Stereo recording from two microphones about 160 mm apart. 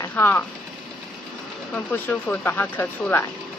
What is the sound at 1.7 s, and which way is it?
Speech, 10° left (ahead or behind).